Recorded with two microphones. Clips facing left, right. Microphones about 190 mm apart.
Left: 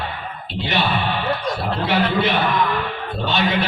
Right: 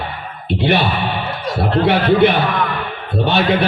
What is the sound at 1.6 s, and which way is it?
A man's voice, 60° right (ahead or behind).